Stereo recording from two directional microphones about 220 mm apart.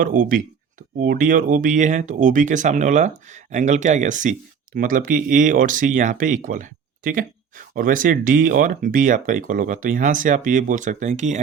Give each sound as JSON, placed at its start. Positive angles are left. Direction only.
{"t": 0.0, "sound": "speech", "side_deg": -40}